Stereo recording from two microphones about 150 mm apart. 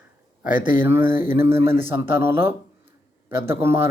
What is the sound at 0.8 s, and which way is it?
Speech, 15° right (ahead or behind).